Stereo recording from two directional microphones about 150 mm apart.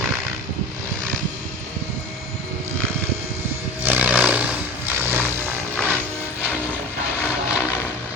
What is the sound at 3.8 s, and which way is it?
Music, 10° right (ahead or behind).